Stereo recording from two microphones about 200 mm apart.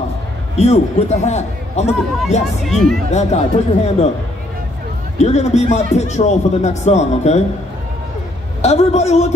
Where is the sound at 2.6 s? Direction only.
Centre (ahead or behind).